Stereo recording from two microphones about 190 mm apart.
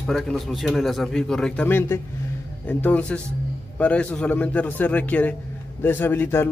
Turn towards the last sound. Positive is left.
turn(degrees=10)  # may be behind; listen again after turning